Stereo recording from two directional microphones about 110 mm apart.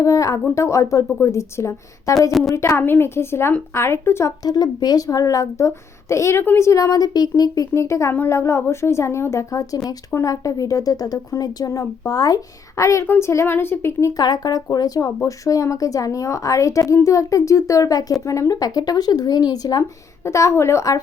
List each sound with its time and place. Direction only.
0.0 s speech: 30° left (ahead or behind)
4.4 s speech: 35° left (ahead or behind); by 14.1 s 20° left (ahead or behind)
14.1 s speech: 35° left (ahead or behind)